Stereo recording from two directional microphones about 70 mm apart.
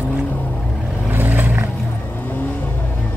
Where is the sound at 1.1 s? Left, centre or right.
Right.